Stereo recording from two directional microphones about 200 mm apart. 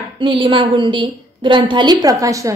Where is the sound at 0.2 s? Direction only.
25° right (ahead or behind).